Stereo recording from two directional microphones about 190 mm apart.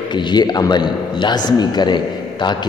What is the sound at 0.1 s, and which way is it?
A man's voice, 20° left (ahead or behind).